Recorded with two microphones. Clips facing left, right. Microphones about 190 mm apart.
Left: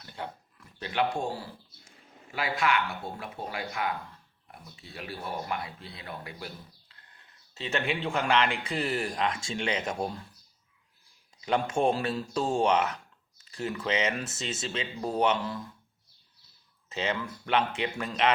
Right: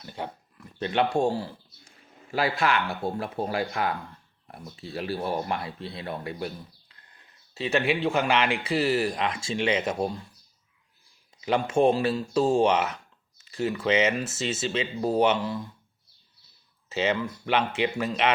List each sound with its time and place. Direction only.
0.8 s speech: 25° right (ahead or behind)
7.5 s speech: 10° right (ahead or behind)
11.4 s speech: 5° right (ahead or behind)
16.9 s speech: 5° right (ahead or behind)